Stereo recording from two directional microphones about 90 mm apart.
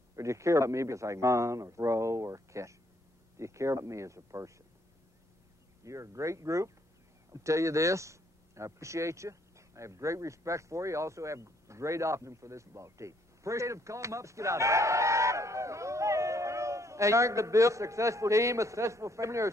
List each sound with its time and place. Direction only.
0.1 s speech: 35° right (ahead or behind)
5.9 s speech: 35° right (ahead or behind)